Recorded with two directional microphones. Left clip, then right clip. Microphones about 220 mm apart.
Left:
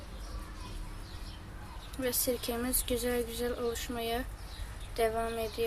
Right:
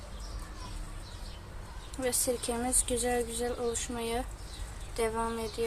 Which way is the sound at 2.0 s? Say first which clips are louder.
Right 1 dB; 10° right (ahead or behind).